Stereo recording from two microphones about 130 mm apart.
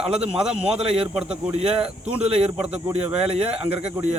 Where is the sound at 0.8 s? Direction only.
45° right (ahead or behind).